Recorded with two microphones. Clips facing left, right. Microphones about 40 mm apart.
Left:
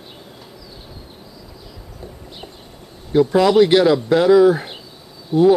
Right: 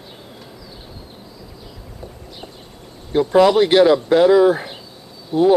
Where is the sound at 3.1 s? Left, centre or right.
Centre.